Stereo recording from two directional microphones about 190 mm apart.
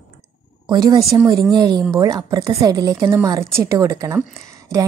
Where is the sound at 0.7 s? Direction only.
20° right (ahead or behind).